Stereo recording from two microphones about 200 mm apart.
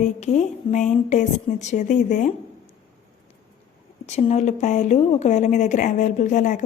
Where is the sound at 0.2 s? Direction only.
35° left (ahead or behind).